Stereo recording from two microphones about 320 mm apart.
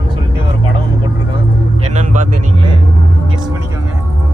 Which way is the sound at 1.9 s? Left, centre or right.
Right.